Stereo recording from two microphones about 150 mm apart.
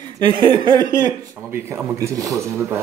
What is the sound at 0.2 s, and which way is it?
Speech, 35° right (ahead or behind).